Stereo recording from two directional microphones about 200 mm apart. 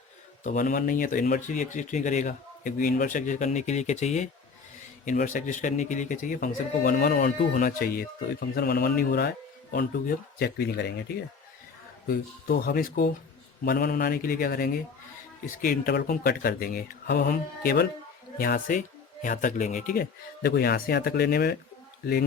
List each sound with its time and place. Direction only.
0.4 s speech: 40° left (ahead or behind)
12.0 s speech: 50° left (ahead or behind)